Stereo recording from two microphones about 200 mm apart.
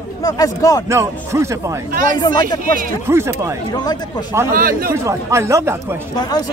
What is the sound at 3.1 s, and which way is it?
Speech, 15° right (ahead or behind).